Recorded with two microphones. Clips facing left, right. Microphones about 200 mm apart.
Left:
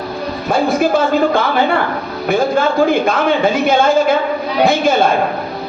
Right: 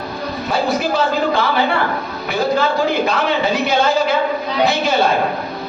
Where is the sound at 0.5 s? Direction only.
50° left (ahead or behind).